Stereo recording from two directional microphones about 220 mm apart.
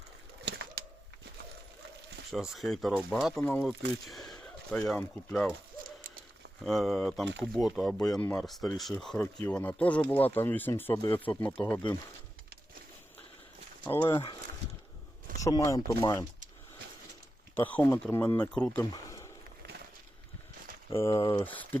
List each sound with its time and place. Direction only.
0.4 s bird: 50° right (ahead or behind)
2.3 s speech: centre (ahead or behind)
4.0 s gunshot: centre (ahead or behind)
4.9 s speech: 5° left (ahead or behind)
6.7 s speech: centre (ahead or behind)
13.9 s speech: 20° left (ahead or behind)
15.4 s speech: 15° left (ahead or behind)
17.5 s speech: 10° left (ahead or behind)
21.0 s speech: 15° left (ahead or behind)